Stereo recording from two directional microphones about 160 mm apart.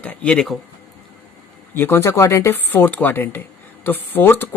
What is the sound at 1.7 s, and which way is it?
Speech, 15° left (ahead or behind).